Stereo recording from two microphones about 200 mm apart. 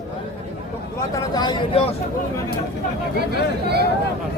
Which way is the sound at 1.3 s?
25° left (ahead or behind).